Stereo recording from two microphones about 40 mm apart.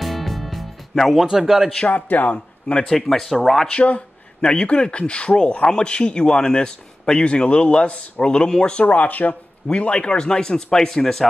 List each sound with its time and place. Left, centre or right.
0.0 s music: centre
1.2 s a man's voice: centre
1.9 s speech: left
2.3 s speech: left
2.9 s speech: centre
3.6 s speech: left
8.8 s speech: left
9.7 s speech: left; by 11.2 s centre